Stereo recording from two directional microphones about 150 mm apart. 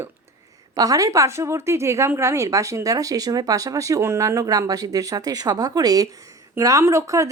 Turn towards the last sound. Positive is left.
turn(degrees=-20)  # may be behind; listen again after turning